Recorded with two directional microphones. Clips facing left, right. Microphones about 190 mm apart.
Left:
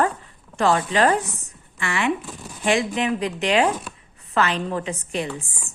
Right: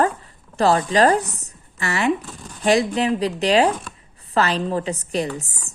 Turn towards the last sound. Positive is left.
turn(degrees=-40)  # may be behind; listen again after turning